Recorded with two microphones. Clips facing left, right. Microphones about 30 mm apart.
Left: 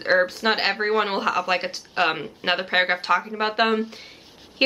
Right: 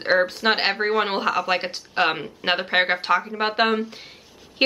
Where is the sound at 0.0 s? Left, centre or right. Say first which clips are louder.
Even; centre.